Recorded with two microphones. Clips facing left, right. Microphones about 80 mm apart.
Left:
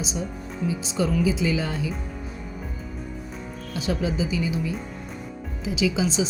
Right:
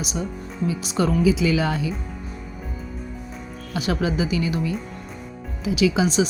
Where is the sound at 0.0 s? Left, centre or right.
Right.